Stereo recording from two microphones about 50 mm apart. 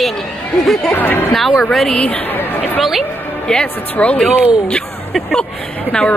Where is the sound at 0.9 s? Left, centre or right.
Left.